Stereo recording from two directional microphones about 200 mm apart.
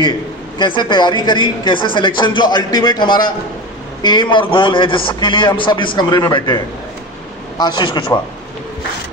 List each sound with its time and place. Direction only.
0.6 s a man's voice: 25° left (ahead or behind)